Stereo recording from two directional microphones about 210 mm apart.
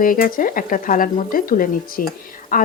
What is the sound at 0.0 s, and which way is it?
A woman's voice, 40° left (ahead or behind).